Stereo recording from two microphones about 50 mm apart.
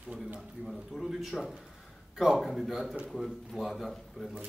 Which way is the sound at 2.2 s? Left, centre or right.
Centre.